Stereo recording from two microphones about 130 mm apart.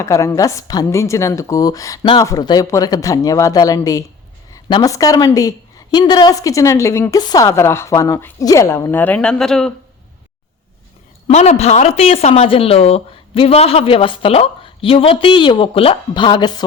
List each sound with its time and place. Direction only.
0.0 s a woman's voice: 25° left (ahead or behind); by 9.7 s 5° left (ahead or behind)
11.3 s speech: 60° left (ahead or behind); by 16.6 s 35° left (ahead or behind)